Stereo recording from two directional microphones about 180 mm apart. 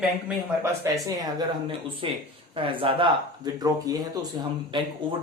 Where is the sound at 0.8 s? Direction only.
20° right (ahead or behind).